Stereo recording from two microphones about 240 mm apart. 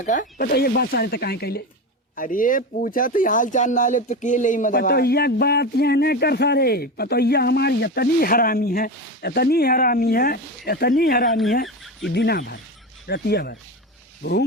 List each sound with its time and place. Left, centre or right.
0.0 s speech: left